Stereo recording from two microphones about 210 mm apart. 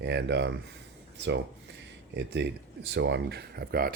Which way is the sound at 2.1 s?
55° right (ahead or behind).